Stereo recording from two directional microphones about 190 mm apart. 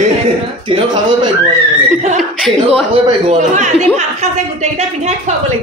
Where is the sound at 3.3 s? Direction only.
40° right (ahead or behind).